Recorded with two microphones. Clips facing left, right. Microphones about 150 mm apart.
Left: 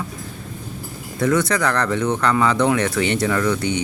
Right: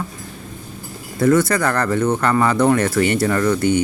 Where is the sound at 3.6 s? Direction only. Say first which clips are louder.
Right 6 dB; 45° right (ahead or behind).